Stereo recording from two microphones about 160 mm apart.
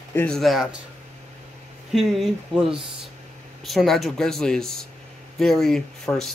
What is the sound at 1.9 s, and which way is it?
Speech, centre (ahead or behind).